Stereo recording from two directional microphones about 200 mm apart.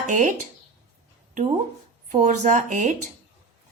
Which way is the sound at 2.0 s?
40° right (ahead or behind).